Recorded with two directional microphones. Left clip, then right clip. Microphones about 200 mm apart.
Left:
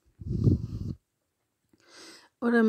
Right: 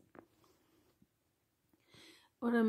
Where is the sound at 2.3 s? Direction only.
30° left (ahead or behind).